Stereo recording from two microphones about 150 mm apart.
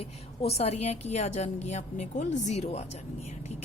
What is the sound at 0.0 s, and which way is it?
A woman's voice, 45° left (ahead or behind).